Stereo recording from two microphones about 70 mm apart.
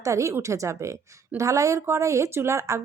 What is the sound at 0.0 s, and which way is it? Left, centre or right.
Speech, right.